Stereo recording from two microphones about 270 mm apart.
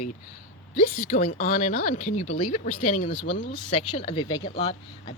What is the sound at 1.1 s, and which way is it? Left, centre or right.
Speech, left.